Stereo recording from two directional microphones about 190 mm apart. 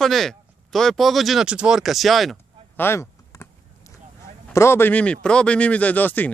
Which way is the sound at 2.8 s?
15° left (ahead or behind).